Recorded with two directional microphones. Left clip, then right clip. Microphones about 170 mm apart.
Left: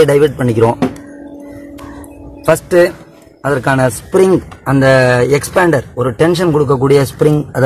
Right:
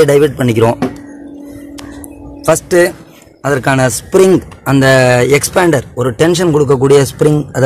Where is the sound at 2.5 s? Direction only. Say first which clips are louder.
Even; 5° right (ahead or behind).